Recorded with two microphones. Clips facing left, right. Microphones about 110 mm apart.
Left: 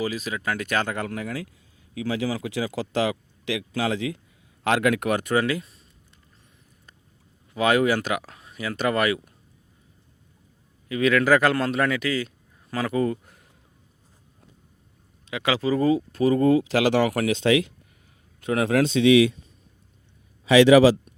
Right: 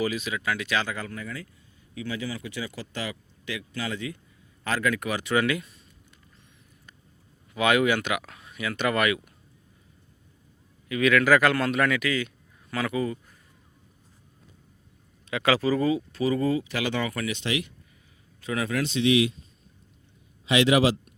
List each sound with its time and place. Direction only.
0.0 s speech: 35° left (ahead or behind); by 1.5 s 75° left (ahead or behind)
2.0 s speech: 90° left
4.6 s speech: 65° left (ahead or behind)
5.3 s speech: 35° left (ahead or behind)
7.5 s speech: 35° left (ahead or behind)
10.8 s a man's voice: 30° left (ahead or behind); by 13.4 s 55° left (ahead or behind)
15.3 s speech: 20° left (ahead or behind)
15.8 s speech: 40° left (ahead or behind); by 17.7 s 85° left
18.3 s a man's voice: 55° left (ahead or behind)